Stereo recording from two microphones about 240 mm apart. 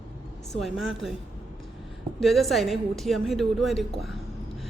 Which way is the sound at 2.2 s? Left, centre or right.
Centre.